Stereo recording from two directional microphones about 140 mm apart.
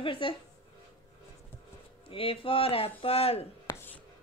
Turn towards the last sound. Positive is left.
turn(degrees=15)  # may be behind; listen again after turning